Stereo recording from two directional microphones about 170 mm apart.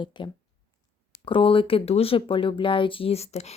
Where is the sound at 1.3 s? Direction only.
30° left (ahead or behind).